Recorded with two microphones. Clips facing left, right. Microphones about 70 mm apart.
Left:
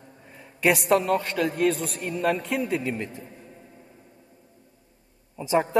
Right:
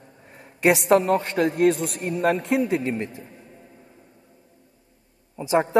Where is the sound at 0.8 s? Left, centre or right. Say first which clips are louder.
Right 3 dB; right.